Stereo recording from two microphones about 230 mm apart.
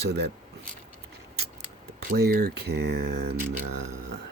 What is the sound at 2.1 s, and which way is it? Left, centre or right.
Speech, right.